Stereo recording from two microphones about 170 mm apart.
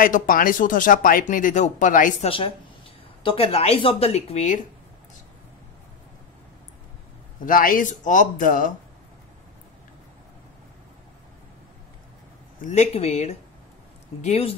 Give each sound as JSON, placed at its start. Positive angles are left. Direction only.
{"t": 0.0, "sound": "speech", "side_deg": 55}
{"t": 2.2, "sound": "speech", "side_deg": 30}
{"t": 7.4, "sound": "speech", "side_deg": 55}
{"t": 12.6, "sound": "speech", "side_deg": 40}